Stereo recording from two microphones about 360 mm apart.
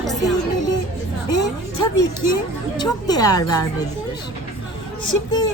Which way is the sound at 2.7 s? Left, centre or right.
Centre.